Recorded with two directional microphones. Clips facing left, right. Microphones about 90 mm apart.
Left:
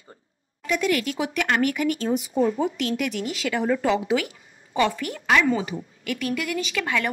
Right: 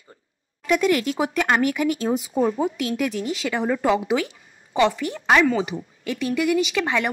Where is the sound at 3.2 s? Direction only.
25° right (ahead or behind).